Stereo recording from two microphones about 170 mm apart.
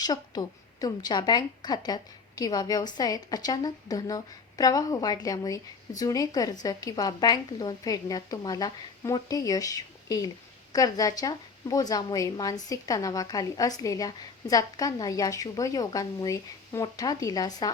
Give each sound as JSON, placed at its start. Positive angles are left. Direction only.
{"t": 0.0, "sound": "a woman's voice", "side_deg": 25}